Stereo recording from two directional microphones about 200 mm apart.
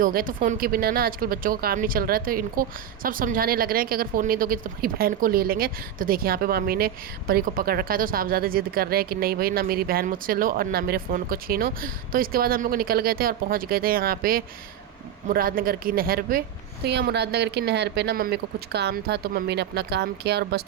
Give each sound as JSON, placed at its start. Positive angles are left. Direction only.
{"t": 0.0, "sound": "speech", "side_deg": -45}